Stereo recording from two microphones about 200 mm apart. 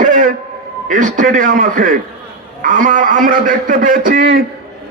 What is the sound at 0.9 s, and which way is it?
A man's voice, 40° right (ahead or behind).